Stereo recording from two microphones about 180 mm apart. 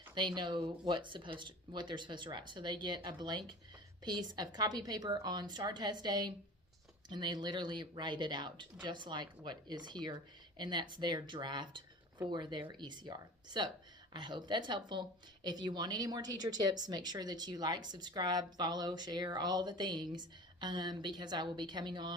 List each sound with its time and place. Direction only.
0.1 s a woman's voice: 25° right (ahead or behind)